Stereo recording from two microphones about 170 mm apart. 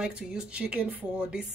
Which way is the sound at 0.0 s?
5° right (ahead or behind).